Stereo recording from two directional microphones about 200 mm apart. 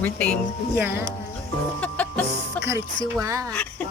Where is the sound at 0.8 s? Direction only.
10° right (ahead or behind).